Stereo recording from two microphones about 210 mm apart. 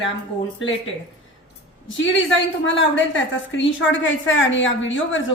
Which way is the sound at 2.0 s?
65° left (ahead or behind).